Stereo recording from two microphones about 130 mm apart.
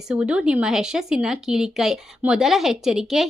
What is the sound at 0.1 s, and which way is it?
Speech, 10° right (ahead or behind).